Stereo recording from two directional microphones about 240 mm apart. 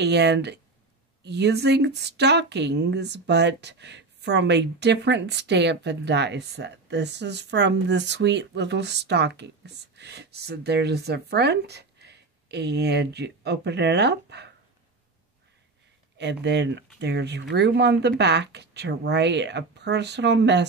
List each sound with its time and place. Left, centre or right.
0.0 s speech: right
16.2 s speech: right